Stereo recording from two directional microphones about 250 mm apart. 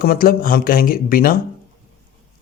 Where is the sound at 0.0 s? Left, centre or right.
Left.